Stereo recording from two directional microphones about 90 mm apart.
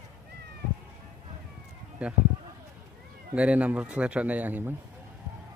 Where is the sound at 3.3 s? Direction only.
15° right (ahead or behind).